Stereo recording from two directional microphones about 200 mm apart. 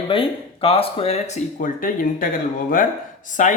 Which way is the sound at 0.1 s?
30° left (ahead or behind).